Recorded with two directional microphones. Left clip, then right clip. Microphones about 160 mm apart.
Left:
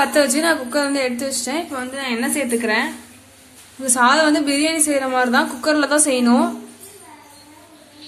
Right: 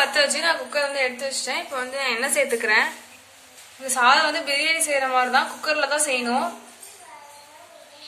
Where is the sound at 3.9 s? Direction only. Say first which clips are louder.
Left 3 dB; 60° left (ahead or behind).